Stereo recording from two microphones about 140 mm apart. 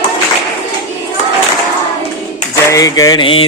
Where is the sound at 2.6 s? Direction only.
25° left (ahead or behind).